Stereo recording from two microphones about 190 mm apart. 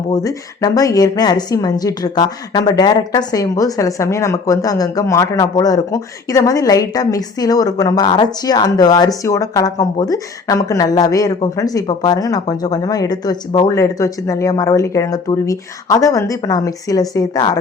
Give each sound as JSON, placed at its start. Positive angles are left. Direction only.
{"t": 0.1, "sound": "a woman's voice", "side_deg": 20}